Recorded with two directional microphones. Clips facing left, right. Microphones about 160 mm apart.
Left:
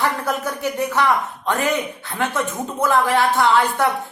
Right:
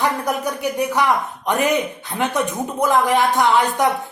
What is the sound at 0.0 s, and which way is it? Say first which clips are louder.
Speech: right 1 dB; 15° right (ahead or behind).